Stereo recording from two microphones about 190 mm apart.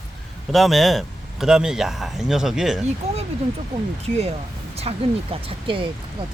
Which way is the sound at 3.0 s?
35° right (ahead or behind).